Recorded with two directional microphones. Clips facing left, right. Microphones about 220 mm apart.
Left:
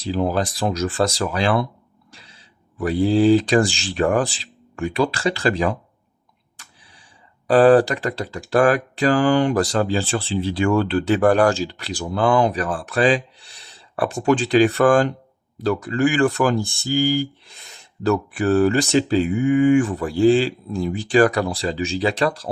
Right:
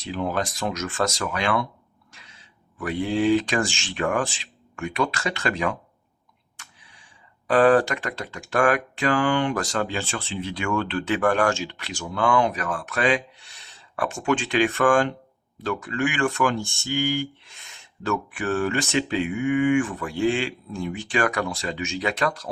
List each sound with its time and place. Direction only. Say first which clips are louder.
0.0 s speech: left 5 dB; 35° left (ahead or behind)
7.4 s speech: left 5 dB; 35° left (ahead or behind)